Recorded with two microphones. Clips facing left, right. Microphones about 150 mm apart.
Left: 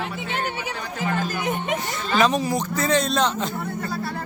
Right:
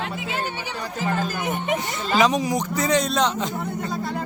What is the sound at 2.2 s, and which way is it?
Speech, 15° right (ahead or behind).